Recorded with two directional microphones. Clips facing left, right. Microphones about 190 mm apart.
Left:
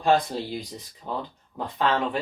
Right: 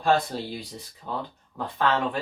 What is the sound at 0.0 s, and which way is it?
Speech, 20° left (ahead or behind).